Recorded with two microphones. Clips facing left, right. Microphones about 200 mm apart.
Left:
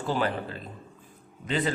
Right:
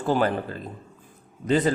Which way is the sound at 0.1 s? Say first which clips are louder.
Right 5 dB; 45° right (ahead or behind).